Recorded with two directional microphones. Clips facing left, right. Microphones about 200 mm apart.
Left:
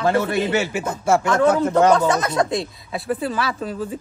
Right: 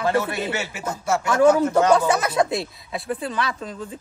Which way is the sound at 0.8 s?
55° left (ahead or behind).